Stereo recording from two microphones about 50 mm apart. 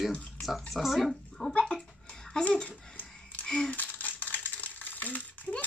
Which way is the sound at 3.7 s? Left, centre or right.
Left.